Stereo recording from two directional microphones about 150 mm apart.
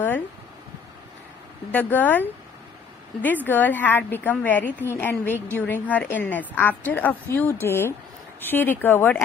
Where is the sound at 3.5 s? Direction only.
10° left (ahead or behind).